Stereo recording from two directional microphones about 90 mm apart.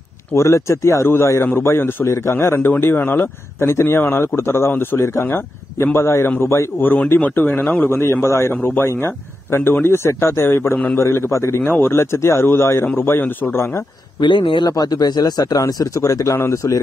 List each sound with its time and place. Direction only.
0.4 s a man's voice: 30° left (ahead or behind)
14.2 s a man's voice: 65° left (ahead or behind)
14.7 s speech: 45° left (ahead or behind)